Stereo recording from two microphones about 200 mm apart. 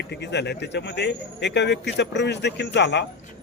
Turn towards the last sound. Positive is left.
turn(degrees=60)  # may be behind; listen again after turning